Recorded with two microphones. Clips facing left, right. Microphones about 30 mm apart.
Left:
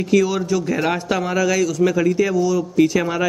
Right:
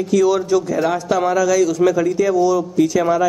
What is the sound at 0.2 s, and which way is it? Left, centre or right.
Speech, centre.